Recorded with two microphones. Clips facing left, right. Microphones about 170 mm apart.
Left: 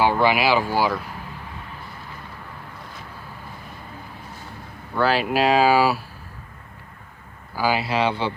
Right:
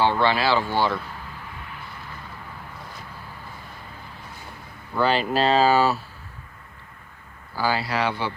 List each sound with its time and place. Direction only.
0.0 s speech: 10° left (ahead or behind)
4.9 s speech: 5° left (ahead or behind)
7.5 s speech: 15° left (ahead or behind)